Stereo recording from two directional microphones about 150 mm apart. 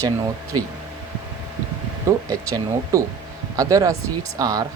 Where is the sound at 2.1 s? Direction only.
20° right (ahead or behind).